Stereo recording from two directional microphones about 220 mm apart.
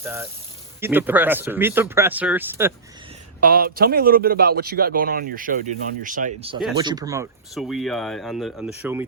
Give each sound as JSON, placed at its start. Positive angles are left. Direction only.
{"t": 0.0, "sound": "speech", "side_deg": -10}
{"t": 3.4, "sound": "a man's voice", "side_deg": -40}
{"t": 6.7, "sound": "speech", "side_deg": -15}
{"t": 7.5, "sound": "speech", "side_deg": 0}